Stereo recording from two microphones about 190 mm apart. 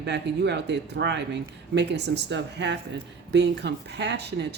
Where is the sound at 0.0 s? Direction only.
65° right (ahead or behind).